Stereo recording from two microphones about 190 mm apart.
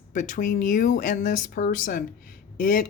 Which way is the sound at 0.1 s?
45° left (ahead or behind).